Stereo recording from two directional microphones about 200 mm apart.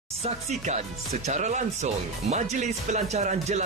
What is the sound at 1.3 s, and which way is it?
Speech, 35° right (ahead or behind).